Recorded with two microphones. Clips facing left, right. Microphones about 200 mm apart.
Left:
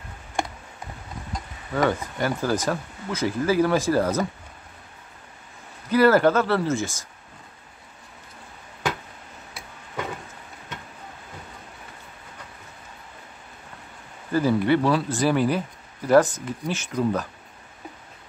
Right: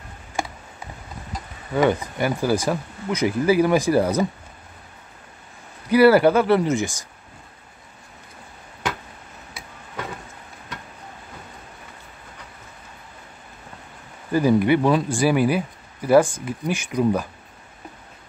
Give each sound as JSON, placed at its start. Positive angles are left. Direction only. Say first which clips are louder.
{"t": 1.8, "sound": "speech", "louder": "right 3 dB", "side_deg": -15}
{"t": 5.9, "sound": "speech", "louder": "right 3 dB", "side_deg": -10}
{"t": 14.3, "sound": "speech", "louder": "right 3 dB", "side_deg": -15}